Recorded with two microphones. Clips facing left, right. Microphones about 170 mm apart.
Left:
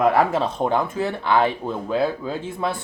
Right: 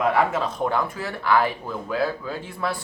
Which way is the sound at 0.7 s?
20° left (ahead or behind).